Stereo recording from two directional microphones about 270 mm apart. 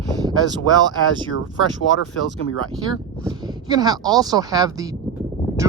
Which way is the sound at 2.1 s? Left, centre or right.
Left.